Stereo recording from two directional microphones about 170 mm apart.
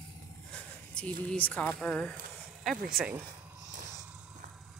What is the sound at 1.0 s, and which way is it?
Speech, 5° left (ahead or behind).